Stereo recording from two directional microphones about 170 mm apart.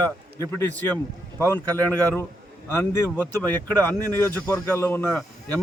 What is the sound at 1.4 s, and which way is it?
Speech, 10° left (ahead or behind).